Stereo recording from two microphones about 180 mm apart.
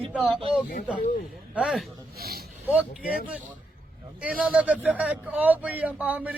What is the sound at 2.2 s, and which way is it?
Speech, 60° right (ahead or behind).